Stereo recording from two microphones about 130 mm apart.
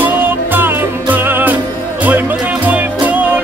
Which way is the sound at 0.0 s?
15° right (ahead or behind).